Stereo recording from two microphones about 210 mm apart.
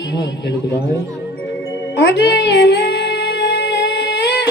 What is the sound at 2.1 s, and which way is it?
Music, 50° left (ahead or behind).